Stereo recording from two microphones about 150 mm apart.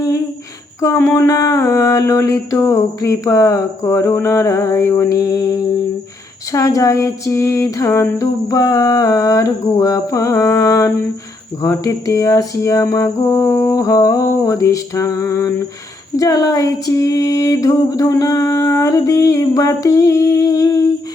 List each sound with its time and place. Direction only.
0.8 s mantra: 20° left (ahead or behind)